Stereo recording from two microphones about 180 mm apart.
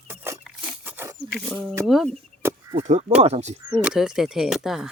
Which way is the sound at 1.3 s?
5° right (ahead or behind).